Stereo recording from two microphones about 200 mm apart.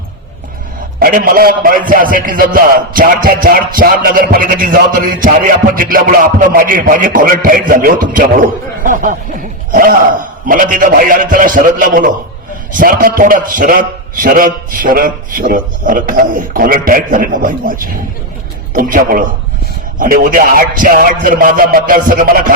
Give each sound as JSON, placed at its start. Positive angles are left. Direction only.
{"t": 0.9, "sound": "a man's voice", "side_deg": -45}
{"t": 10.5, "sound": "a man's voice", "side_deg": -40}